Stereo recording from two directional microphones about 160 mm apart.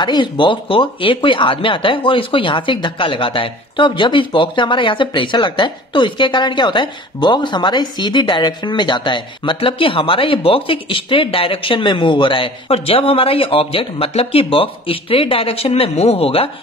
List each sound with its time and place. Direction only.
0.0 s speech: 30° left (ahead or behind)